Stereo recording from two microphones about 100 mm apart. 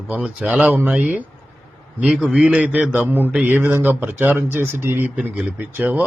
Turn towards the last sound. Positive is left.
turn(degrees=-15)  # may be behind; listen again after turning